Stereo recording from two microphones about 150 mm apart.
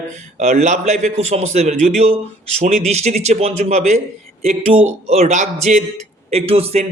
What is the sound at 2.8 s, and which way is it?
A man's voice, 50° right (ahead or behind).